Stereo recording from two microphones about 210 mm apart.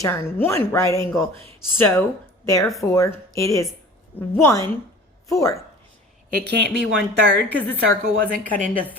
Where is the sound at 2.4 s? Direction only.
15° left (ahead or behind).